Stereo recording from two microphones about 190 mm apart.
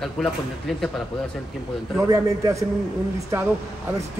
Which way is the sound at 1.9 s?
15° right (ahead or behind).